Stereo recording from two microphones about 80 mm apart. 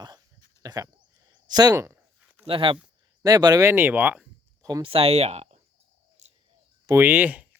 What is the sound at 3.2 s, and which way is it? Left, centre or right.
Speech, right.